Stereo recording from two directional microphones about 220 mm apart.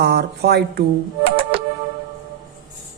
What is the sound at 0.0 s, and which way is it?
Speech, 50° right (ahead or behind).